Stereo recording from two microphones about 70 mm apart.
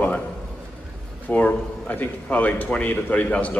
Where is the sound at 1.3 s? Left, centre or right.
Left.